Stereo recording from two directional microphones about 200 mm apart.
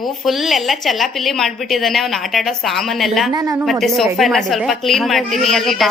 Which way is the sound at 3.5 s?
Centre (ahead or behind).